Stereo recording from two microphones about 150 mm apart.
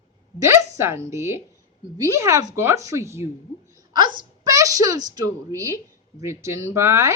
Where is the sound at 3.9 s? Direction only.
30° right (ahead or behind).